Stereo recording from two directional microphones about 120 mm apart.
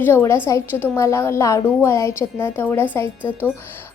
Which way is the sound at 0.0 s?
20° left (ahead or behind).